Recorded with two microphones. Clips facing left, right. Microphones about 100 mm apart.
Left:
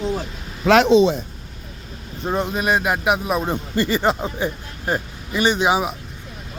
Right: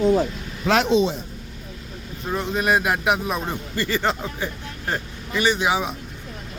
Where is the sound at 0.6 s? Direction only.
85° left.